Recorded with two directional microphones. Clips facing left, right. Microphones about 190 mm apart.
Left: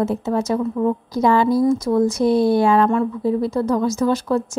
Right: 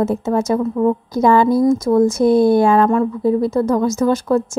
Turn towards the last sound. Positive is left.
turn(degrees=-45)  # may be behind; listen again after turning